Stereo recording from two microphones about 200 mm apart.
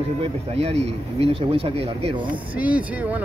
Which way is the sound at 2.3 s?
5° right (ahead or behind).